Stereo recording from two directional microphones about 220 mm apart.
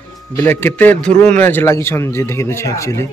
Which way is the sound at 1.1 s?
35° right (ahead or behind).